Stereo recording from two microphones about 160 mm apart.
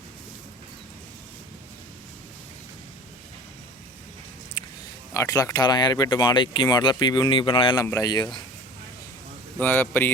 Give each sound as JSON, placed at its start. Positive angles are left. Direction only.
{"t": 4.6, "sound": "a sound", "side_deg": 25}
{"t": 5.1, "sound": "speech", "side_deg": 20}
{"t": 9.6, "sound": "a man's voice", "side_deg": 10}